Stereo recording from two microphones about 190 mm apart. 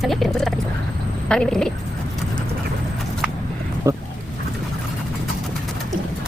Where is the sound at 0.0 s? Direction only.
Centre (ahead or behind).